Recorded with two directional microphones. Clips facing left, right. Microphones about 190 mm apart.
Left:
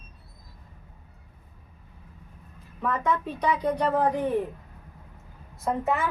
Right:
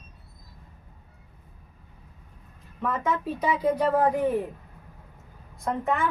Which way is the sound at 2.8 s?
Centre (ahead or behind).